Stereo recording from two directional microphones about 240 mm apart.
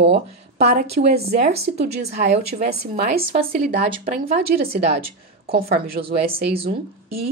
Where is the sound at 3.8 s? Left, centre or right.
Right.